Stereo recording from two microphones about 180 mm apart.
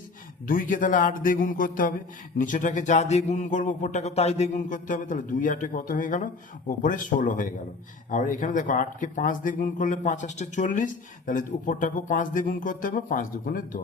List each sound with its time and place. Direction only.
0.4 s speech: 50° left (ahead or behind)